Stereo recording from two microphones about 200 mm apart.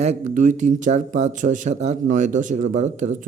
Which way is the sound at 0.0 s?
35° right (ahead or behind).